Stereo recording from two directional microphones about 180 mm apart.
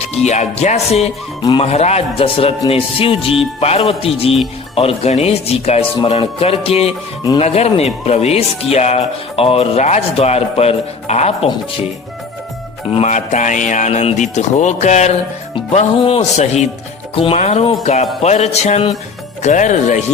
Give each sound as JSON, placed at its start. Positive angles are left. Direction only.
{"t": 0.3, "sound": "speech", "side_deg": 40}
{"t": 1.4, "sound": "speech", "side_deg": 20}
{"t": 1.6, "sound": "speech", "side_deg": 35}
{"t": 12.9, "sound": "speech", "side_deg": 40}